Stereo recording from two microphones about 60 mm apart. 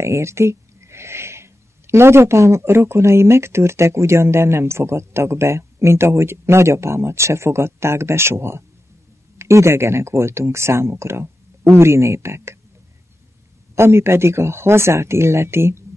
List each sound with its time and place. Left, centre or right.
0.0 s speech: right
13.7 s speech: right